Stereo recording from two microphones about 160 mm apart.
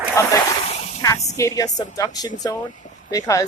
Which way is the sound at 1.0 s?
20° left (ahead or behind).